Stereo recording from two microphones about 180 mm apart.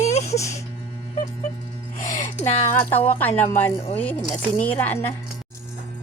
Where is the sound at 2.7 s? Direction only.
10° left (ahead or behind).